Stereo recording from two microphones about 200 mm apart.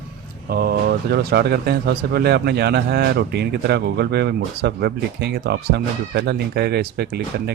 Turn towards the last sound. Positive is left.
turn(degrees=-55)  # may be behind; listen again after turning